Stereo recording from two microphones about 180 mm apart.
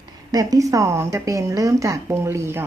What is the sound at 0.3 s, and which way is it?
A woman's voice, 20° right (ahead or behind).